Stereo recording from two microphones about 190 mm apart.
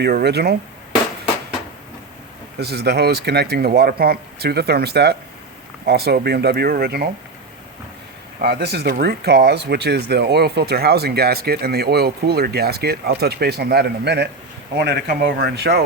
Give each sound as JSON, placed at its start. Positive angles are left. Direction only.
{"t": 0.0, "sound": "speech", "side_deg": -60}
{"t": 2.6, "sound": "speech", "side_deg": -60}
{"t": 8.4, "sound": "speech", "side_deg": -60}